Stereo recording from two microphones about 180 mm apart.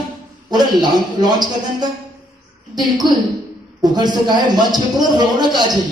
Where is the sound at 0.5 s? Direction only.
25° right (ahead or behind).